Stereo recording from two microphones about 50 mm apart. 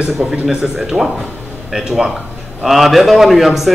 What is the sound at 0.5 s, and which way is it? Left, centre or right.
A man's voice, centre.